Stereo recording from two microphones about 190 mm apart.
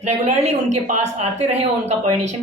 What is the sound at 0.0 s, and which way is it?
A woman's voice, 35° right (ahead or behind).